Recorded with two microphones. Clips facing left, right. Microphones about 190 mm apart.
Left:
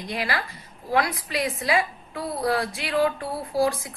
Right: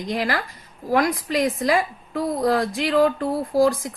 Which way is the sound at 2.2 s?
15° right (ahead or behind).